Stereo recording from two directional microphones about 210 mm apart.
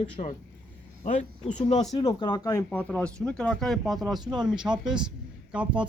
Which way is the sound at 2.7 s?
5° left (ahead or behind).